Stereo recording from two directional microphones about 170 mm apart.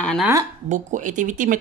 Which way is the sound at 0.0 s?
5° left (ahead or behind).